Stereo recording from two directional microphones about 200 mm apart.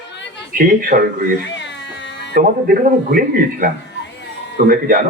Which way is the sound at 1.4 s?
60° left (ahead or behind).